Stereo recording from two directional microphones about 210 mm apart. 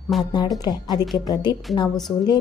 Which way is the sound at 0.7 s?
20° left (ahead or behind).